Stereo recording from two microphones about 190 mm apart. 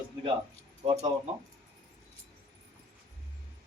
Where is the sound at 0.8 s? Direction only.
35° right (ahead or behind).